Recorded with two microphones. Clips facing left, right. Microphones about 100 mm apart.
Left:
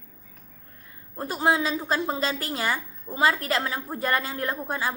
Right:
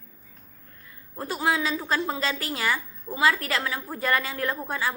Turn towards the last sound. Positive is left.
turn(degrees=20)  # may be behind; listen again after turning